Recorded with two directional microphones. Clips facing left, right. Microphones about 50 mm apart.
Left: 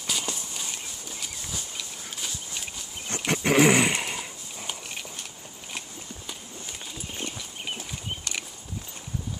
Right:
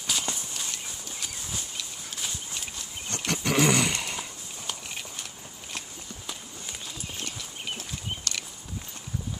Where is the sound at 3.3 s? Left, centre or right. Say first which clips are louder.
Left 4 dB; left.